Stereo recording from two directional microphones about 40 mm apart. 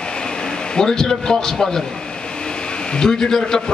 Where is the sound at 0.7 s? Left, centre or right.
Centre.